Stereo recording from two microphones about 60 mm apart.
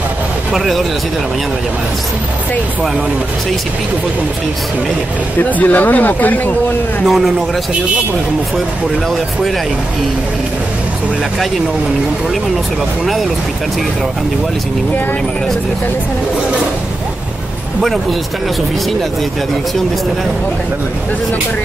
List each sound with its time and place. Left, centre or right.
0.5 s a man's voice: centre
5.4 s speech: left
7.1 s a man's voice: centre